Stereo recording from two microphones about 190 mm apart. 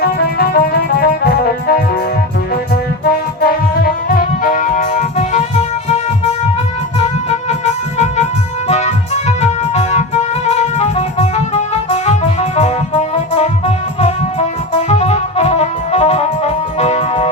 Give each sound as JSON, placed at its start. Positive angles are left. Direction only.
{"t": 0.0, "sound": "music", "side_deg": 55}
{"t": 3.4, "sound": "music", "side_deg": 50}
{"t": 7.6, "sound": "music", "side_deg": 35}